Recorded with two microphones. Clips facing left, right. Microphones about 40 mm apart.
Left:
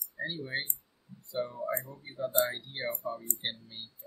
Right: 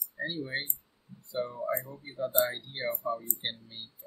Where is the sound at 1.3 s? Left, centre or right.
Centre.